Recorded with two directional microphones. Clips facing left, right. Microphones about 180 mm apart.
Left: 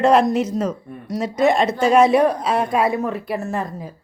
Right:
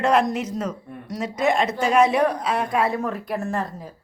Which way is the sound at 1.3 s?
10° right (ahead or behind).